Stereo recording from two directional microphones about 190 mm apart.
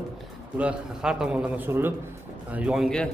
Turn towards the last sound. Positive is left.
turn(degrees=0)  # may be behind; listen again after turning